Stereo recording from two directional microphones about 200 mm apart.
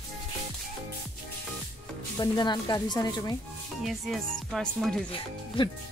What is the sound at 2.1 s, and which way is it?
Speech, 20° left (ahead or behind).